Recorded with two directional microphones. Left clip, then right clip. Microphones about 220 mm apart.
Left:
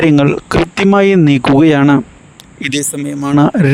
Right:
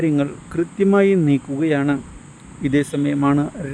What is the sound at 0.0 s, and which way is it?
Speech, 50° left (ahead or behind).